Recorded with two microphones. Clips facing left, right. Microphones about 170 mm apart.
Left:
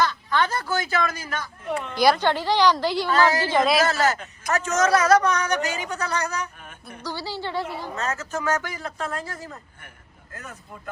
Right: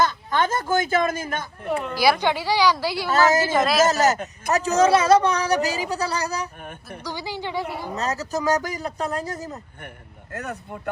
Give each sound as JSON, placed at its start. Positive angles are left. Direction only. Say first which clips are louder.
{"t": 0.0, "sound": "a sound", "louder": "right 1 dB", "side_deg": -45}
{"t": 2.0, "sound": "a woman's voice", "louder": "left 1 dB", "side_deg": -10}
{"t": 3.1, "sound": "a woman's voice", "louder": "right 3 dB", "side_deg": -45}
{"t": 3.5, "sound": "a woman's voice", "louder": "even", "side_deg": -5}
{"t": 3.8, "sound": "a man's voice", "louder": "right 3 dB", "side_deg": -40}
{"t": 7.0, "sound": "a woman's voice", "louder": "even", "side_deg": -15}
{"t": 7.9, "sound": "a man's voice", "louder": "right 3 dB", "side_deg": -35}
{"t": 10.3, "sound": "speech", "louder": "right 8 dB", "side_deg": -70}